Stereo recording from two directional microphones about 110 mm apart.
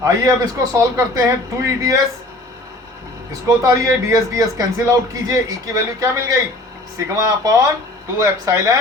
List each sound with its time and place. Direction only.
0.0 s speech: 30° right (ahead or behind)
3.4 s a man's voice: 30° right (ahead or behind)